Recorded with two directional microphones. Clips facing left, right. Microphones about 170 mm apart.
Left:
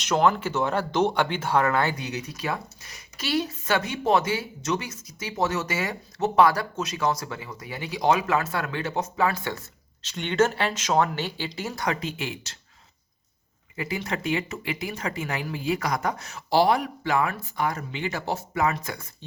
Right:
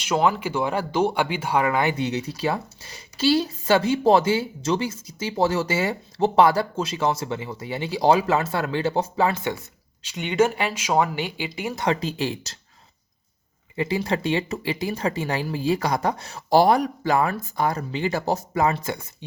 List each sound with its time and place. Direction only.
0.0 s speech: 10° right (ahead or behind)
10.0 s speech: 10° right (ahead or behind)
11.8 s speech: 30° right (ahead or behind)
13.7 s speech: 30° right (ahead or behind)
16.5 s speech: 45° right (ahead or behind)